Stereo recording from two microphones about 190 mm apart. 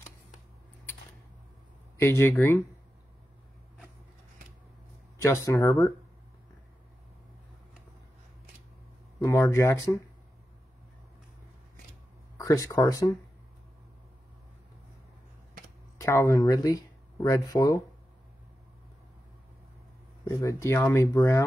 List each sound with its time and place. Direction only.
2.0 s speech: 10° left (ahead or behind)
5.2 s speech: 15° left (ahead or behind)
9.2 s speech: 15° left (ahead or behind)
12.4 s speech: 15° left (ahead or behind)
16.0 s speech: 15° left (ahead or behind)
20.2 s speech: 15° left (ahead or behind)